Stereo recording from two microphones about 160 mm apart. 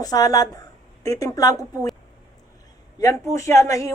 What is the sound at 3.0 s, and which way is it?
Speech, 20° left (ahead or behind).